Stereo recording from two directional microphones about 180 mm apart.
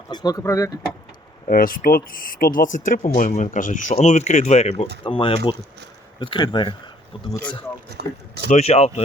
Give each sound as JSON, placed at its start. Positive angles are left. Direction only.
{"t": 0.1, "sound": "speech", "side_deg": 20}
{"t": 1.5, "sound": "speech", "side_deg": 50}
{"t": 5.0, "sound": "speech", "side_deg": 30}
{"t": 8.0, "sound": "speech", "side_deg": -65}
{"t": 8.4, "sound": "speech", "side_deg": 35}